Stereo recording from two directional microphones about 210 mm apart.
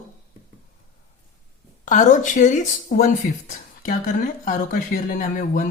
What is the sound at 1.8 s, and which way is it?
Speech, 35° left (ahead or behind).